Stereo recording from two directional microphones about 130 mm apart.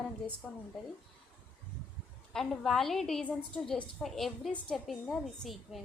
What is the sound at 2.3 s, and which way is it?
A woman's voice, centre (ahead or behind).